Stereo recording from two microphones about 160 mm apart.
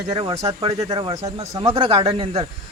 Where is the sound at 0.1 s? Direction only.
35° right (ahead or behind).